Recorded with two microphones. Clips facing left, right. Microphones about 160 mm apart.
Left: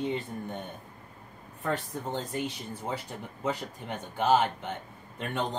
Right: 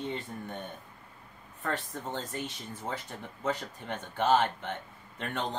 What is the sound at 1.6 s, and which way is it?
Speech, 10° left (ahead or behind).